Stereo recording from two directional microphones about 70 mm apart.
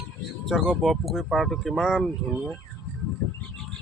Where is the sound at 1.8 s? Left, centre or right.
Centre.